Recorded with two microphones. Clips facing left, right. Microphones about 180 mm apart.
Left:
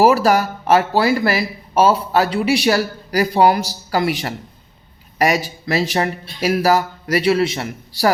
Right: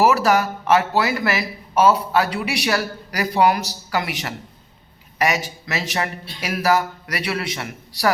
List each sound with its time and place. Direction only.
0.0 s a man's voice: 30° left (ahead or behind)